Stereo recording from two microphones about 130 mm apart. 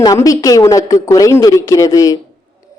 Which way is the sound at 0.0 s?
25° left (ahead or behind).